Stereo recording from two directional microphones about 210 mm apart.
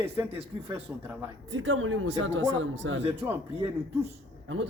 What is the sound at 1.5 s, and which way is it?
A man's voice, 65° right (ahead or behind).